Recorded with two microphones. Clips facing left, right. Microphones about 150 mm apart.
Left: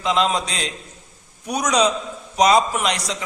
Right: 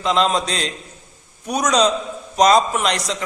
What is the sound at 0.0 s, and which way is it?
A man's voice, 10° left (ahead or behind).